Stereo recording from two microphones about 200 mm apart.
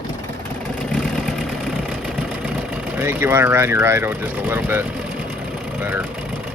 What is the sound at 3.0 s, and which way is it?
Speech, 10° right (ahead or behind).